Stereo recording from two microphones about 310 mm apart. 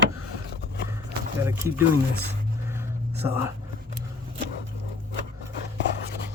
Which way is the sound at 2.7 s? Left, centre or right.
Centre.